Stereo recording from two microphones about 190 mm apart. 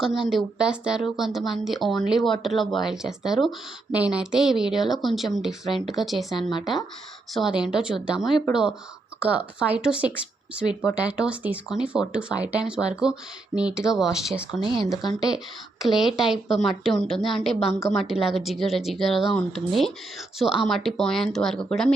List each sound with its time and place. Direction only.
0.0 s a woman's voice: centre (ahead or behind)
7.3 s a woman's voice: 5° right (ahead or behind)
14.6 s speech: 25° right (ahead or behind)
15.8 s a woman's voice: centre (ahead or behind)